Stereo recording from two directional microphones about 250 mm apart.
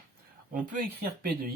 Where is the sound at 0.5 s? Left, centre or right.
Right.